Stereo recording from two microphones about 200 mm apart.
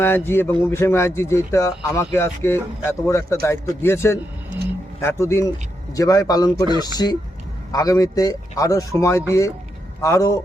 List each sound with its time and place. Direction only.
0.0 s speech: 10° left (ahead or behind)